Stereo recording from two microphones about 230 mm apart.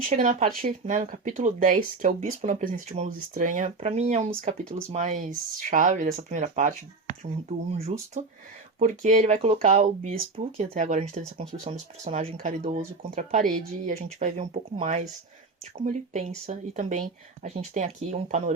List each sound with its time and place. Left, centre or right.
0.0 s speech: right